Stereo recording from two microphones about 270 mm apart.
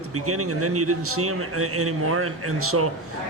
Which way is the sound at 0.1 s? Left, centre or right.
Right.